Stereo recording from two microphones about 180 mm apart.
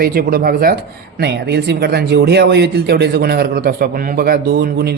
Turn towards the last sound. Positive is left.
turn(degrees=-60)  # may be behind; listen again after turning